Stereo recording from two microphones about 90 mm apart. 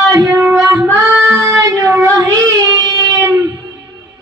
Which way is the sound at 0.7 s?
40° right (ahead or behind).